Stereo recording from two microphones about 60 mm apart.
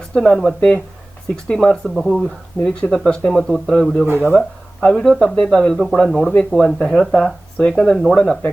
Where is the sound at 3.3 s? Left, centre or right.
Centre.